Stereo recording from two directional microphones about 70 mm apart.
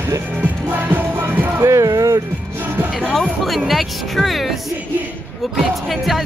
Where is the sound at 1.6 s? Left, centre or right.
Right.